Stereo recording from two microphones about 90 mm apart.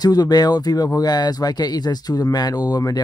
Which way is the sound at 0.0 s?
50° left (ahead or behind).